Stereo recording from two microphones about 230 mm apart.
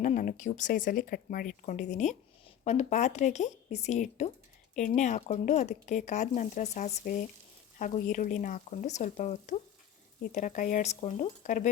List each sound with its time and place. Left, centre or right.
0.0 s speech: left